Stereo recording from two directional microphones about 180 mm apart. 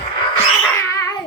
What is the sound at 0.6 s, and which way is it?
Cat, 15° left (ahead or behind).